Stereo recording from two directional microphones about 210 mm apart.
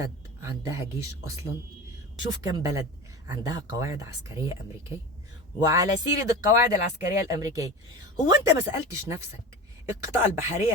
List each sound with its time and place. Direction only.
0.0 s speech: 15° right (ahead or behind)
2.4 s speech: 15° right (ahead or behind)
5.6 s speech: 15° right (ahead or behind)